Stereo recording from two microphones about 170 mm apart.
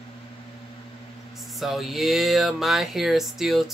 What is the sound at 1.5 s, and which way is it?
Speech, centre (ahead or behind).